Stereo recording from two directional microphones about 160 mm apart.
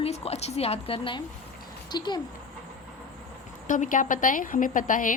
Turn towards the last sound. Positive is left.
turn(degrees=55)  # may be behind; listen again after turning